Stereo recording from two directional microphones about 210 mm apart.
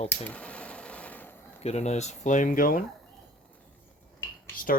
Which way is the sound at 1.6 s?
30° left (ahead or behind).